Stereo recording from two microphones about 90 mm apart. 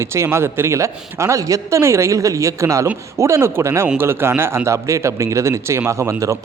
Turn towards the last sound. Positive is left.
turn(degrees=-30)  # may be behind; listen again after turning